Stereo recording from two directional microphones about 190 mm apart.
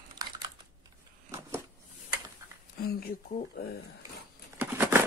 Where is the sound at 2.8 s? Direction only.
55° left (ahead or behind).